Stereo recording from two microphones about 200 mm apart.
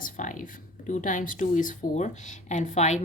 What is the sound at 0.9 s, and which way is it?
Speech, 40° left (ahead or behind).